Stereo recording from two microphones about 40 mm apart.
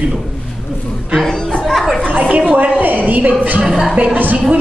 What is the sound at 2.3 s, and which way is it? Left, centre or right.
A woman's voice, right.